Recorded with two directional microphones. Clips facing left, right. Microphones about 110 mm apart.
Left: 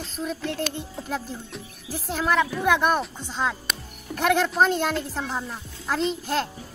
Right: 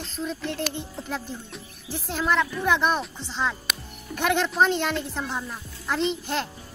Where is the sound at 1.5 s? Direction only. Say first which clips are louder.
Left 1 dB; 5° left (ahead or behind).